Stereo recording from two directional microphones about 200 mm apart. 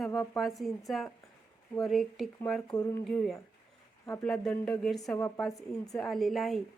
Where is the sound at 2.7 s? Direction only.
15° left (ahead or behind).